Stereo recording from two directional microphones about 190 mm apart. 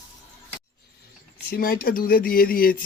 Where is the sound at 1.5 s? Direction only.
50° left (ahead or behind).